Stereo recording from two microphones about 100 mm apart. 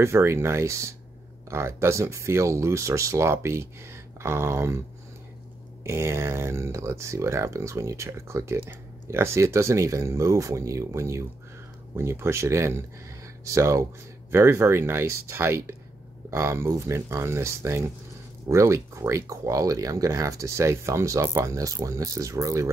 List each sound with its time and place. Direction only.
0.0 s speech: 25° right (ahead or behind)
5.9 s speech: 25° right (ahead or behind)